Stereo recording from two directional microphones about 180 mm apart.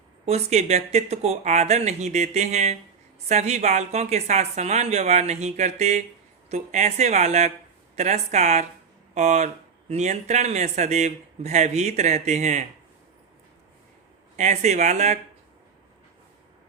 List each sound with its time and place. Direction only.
0.3 s a woman's voice: 40° right (ahead or behind)
14.3 s a woman's voice: 40° right (ahead or behind)